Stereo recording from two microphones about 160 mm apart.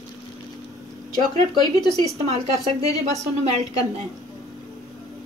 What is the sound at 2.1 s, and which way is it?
Speech, 40° right (ahead or behind).